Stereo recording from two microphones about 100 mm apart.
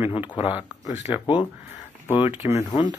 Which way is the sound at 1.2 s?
55° left (ahead or behind).